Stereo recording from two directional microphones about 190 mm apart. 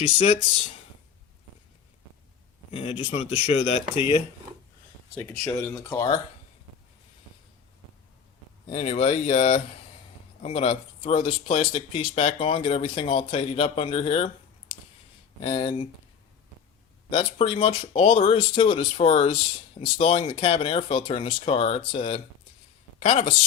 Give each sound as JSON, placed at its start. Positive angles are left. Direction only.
{"t": 3.0, "sound": "speech", "side_deg": 30}
{"t": 5.1, "sound": "speech", "side_deg": 10}
{"t": 8.7, "sound": "speech", "side_deg": 35}
{"t": 15.4, "sound": "speech", "side_deg": 30}
{"t": 17.1, "sound": "speech", "side_deg": 30}